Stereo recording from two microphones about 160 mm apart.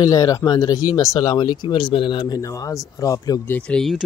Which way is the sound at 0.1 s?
20° left (ahead or behind).